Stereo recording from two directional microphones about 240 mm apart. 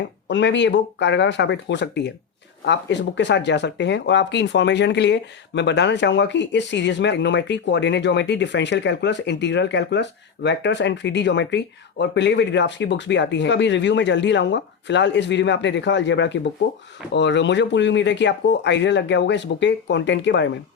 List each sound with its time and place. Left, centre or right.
0.3 s speech: left